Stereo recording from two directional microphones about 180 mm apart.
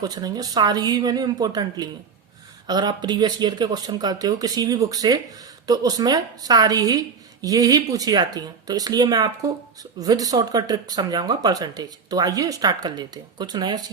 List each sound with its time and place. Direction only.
0.0 s speech: 20° right (ahead or behind)